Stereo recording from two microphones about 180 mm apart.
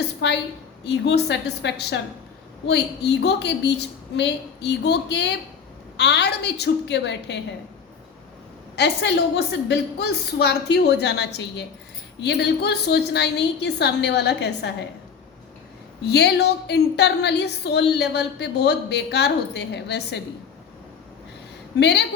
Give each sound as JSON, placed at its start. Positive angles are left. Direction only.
{"t": 0.0, "sound": "a sound", "side_deg": 75}
{"t": 0.9, "sound": "a woman's voice", "side_deg": 70}
{"t": 8.7, "sound": "a woman's voice", "side_deg": 70}
{"t": 16.0, "sound": "a woman's voice", "side_deg": 65}
{"t": 21.8, "sound": "a woman's voice", "side_deg": 70}